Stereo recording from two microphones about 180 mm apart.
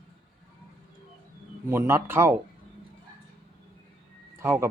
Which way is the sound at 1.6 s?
15° right (ahead or behind).